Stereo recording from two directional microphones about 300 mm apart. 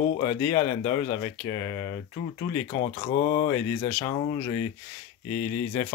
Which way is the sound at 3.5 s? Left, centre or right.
Centre.